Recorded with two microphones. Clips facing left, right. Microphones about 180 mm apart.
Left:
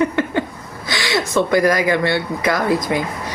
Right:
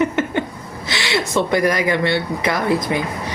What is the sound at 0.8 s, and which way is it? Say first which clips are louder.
Speech: left 1 dB; 25° right (ahead or behind).